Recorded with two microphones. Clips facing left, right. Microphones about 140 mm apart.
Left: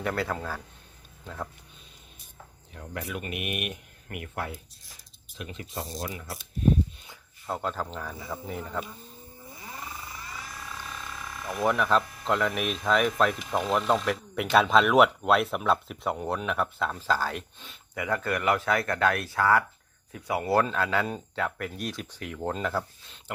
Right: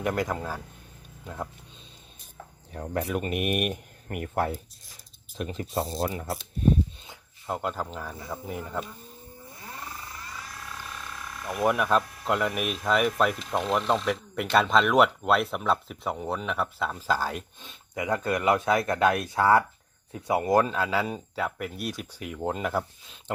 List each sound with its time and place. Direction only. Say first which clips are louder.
0.0 s speech: right 2 dB; 15° right (ahead or behind)
2.7 s speech: right 7 dB; 40° right (ahead or behind)
7.4 s speech: right 1 dB; 10° right (ahead or behind)
9.5 s a sound: even; centre (ahead or behind)
17.0 s speech: right 1 dB; 15° right (ahead or behind)